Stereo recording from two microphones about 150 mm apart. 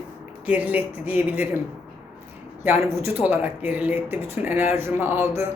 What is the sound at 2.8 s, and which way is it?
Speech, 10° right (ahead or behind).